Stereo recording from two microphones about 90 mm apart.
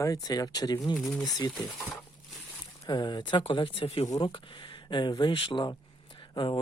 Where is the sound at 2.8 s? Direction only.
50° left (ahead or behind); by 4.0 s 80° left.